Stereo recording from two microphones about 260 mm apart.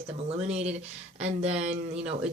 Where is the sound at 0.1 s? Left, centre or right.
Right.